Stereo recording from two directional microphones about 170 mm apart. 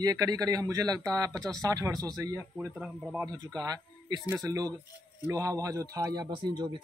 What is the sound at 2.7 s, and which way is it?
Speech, centre (ahead or behind).